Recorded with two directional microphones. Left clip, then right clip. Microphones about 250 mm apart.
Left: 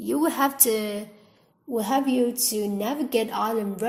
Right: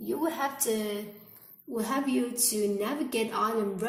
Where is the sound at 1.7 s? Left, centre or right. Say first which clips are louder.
Left 6 dB; left.